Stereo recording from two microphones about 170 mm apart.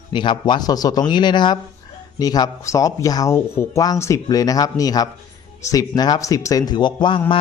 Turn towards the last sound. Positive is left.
turn(degrees=30)  # may be behind; listen again after turning